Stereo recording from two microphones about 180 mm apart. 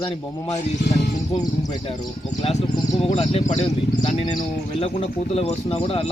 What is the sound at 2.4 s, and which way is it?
Speech, 35° left (ahead or behind).